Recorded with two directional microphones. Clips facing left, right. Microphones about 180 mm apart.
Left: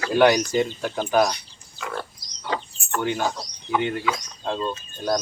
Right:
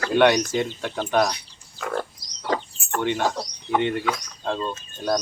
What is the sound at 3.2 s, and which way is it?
Speech, 65° right (ahead or behind).